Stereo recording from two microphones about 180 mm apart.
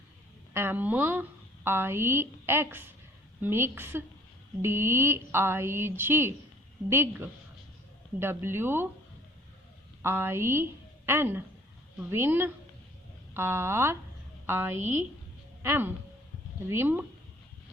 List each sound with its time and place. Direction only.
0.5 s a woman's voice: 10° right (ahead or behind)
10.0 s a woman's voice: 15° right (ahead or behind)